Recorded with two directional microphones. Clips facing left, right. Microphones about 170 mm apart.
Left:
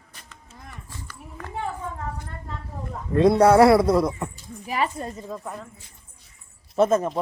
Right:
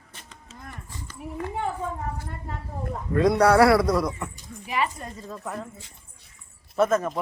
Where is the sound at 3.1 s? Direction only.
25° left (ahead or behind).